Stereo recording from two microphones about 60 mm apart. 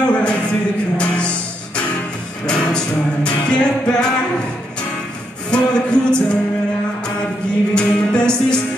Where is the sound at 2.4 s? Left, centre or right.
Centre.